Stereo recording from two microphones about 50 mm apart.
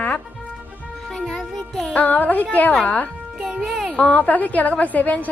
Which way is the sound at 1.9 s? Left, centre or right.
Left.